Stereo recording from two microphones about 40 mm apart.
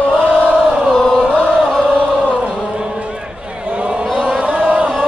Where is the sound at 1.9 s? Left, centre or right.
Right.